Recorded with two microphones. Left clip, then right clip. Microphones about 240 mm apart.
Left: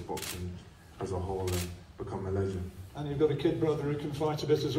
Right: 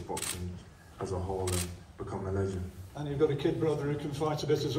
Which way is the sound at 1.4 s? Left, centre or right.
Right.